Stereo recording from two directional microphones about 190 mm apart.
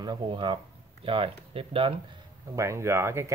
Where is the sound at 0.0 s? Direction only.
25° right (ahead or behind).